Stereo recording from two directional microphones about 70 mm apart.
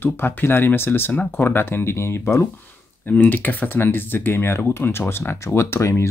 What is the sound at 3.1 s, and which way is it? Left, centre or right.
Speech, left.